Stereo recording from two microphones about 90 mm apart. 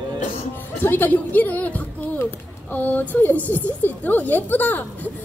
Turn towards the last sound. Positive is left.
turn(degrees=20)  # may be behind; listen again after turning